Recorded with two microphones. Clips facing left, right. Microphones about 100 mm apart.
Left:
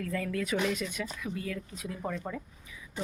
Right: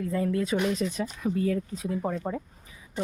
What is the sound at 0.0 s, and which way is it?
Speech, 25° right (ahead or behind).